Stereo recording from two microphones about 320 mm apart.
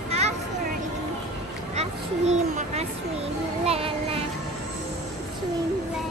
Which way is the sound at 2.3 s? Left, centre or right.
Right.